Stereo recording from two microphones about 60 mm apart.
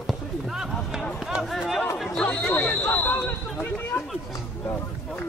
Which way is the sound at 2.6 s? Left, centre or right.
Left.